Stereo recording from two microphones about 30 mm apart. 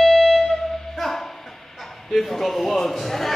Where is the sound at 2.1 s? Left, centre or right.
Centre.